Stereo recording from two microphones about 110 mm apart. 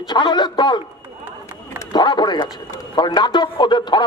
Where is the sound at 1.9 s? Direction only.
40° left (ahead or behind).